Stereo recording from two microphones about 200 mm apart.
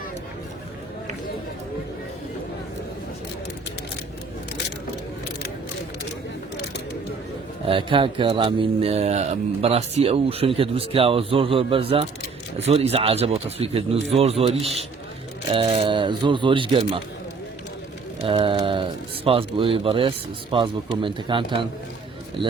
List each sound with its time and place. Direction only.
7.7 s speech: 25° right (ahead or behind)
18.2 s speech: 25° right (ahead or behind)